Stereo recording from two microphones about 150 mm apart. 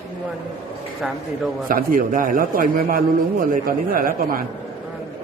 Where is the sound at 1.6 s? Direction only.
70° right (ahead or behind).